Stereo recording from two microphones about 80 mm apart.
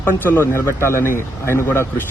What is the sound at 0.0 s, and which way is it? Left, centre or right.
Speech, left.